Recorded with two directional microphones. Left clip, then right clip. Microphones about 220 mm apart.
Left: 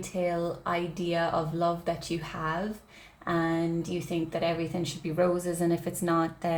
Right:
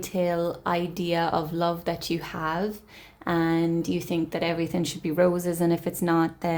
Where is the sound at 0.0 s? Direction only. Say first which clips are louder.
Right 4 dB; 45° right (ahead or behind).